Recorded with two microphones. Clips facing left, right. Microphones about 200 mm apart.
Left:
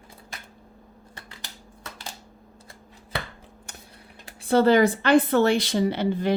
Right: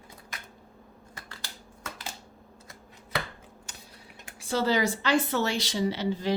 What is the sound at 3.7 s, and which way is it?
Typing, 55° left (ahead or behind).